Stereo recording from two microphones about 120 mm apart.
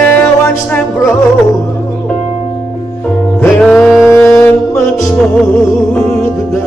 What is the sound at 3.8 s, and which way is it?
Music, 5° right (ahead or behind).